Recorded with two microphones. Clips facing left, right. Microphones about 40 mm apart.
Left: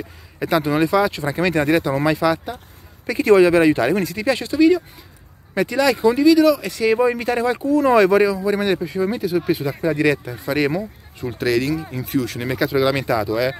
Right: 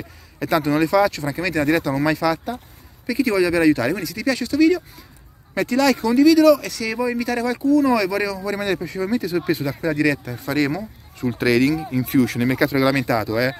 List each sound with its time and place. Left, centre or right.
0.4 s speech: centre
1.1 s speech: left
1.7 s speech: centre
3.1 s speech: left
4.6 s speech: centre
6.6 s speech: left
8.5 s speech: left
9.9 s speech: left
10.2 s speech: centre
11.3 s speech: centre